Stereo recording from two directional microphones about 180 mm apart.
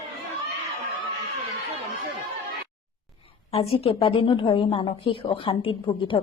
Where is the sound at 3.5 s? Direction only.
30° left (ahead or behind).